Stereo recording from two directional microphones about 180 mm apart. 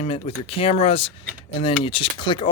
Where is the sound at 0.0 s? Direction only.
30° left (ahead or behind).